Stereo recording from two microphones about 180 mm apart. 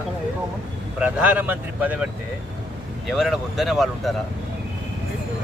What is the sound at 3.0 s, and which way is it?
Speech, centre (ahead or behind).